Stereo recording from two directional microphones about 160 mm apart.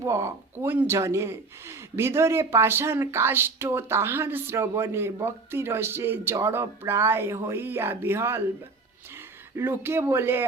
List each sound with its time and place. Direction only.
0.0 s speech: 15° right (ahead or behind)
9.6 s speech: 15° right (ahead or behind)